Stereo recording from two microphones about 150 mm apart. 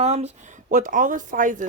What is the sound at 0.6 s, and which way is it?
Speech, 65° right (ahead or behind).